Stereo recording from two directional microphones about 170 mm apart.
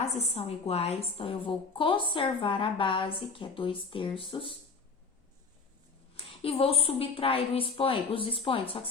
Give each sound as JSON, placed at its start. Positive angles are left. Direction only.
{"t": 0.0, "sound": "a woman's voice", "side_deg": 35}
{"t": 6.1, "sound": "a woman's voice", "side_deg": 35}